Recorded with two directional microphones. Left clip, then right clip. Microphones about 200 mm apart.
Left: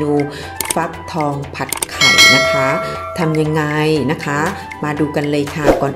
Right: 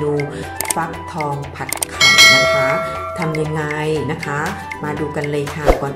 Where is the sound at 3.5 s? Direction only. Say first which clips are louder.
Left 4 dB; 40° left (ahead or behind).